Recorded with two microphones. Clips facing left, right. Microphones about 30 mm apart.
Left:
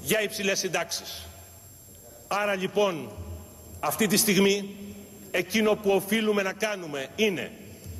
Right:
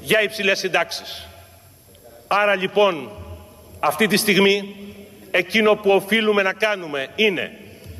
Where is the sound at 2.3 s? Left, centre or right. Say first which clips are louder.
Right 9 dB; right.